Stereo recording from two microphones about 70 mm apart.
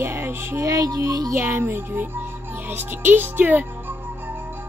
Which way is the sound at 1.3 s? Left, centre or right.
Right.